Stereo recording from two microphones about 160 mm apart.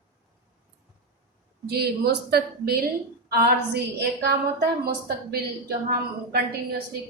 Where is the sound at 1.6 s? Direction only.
80° right.